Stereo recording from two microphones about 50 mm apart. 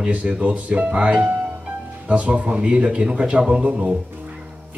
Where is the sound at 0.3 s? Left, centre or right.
Right.